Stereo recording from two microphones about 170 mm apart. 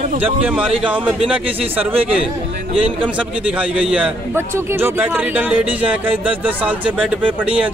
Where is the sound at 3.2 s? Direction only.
5° right (ahead or behind).